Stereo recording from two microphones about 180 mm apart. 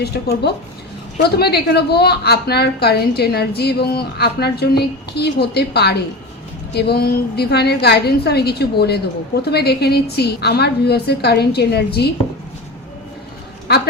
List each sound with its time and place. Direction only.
0.0 s a woman's voice: 65° left (ahead or behind)